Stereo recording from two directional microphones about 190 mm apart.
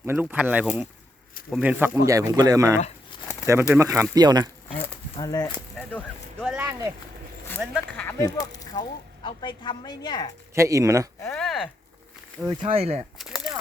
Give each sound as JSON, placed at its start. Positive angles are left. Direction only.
{"t": 0.0, "sound": "speech", "side_deg": -10}
{"t": 2.0, "sound": "speech", "side_deg": -20}
{"t": 4.7, "sound": "speech", "side_deg": 30}
{"t": 5.7, "sound": "speech", "side_deg": 10}
{"t": 6.4, "sound": "speech", "side_deg": -5}
{"t": 6.7, "sound": "speech", "side_deg": -15}
{"t": 7.6, "sound": "speech", "side_deg": 0}
{"t": 8.0, "sound": "a woman's voice", "side_deg": 20}
{"t": 10.5, "sound": "speech", "side_deg": -15}
{"t": 11.2, "sound": "a sound", "side_deg": 5}
{"t": 12.5, "sound": "speech", "side_deg": -30}
{"t": 13.1, "sound": "a sound", "side_deg": 0}